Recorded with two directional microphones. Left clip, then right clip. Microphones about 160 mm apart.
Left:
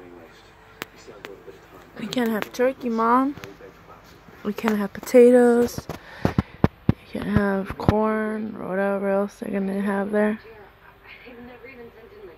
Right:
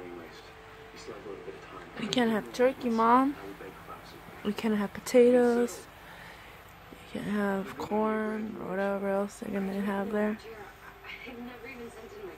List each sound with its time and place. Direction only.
2.0 s speech: 30° left (ahead or behind)
4.5 s speech: 35° left (ahead or behind)
7.1 s speech: 30° left (ahead or behind)